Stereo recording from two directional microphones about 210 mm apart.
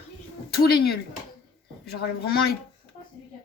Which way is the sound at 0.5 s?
50° left (ahead or behind).